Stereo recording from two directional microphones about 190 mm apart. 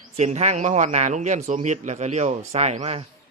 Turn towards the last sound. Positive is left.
turn(degrees=-35)  # may be behind; listen again after turning